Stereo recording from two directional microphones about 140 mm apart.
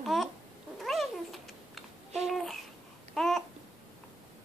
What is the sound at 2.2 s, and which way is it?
Babbling, centre (ahead or behind).